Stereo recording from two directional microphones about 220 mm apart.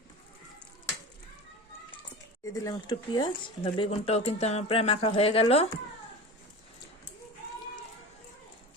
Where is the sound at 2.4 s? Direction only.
15° left (ahead or behind).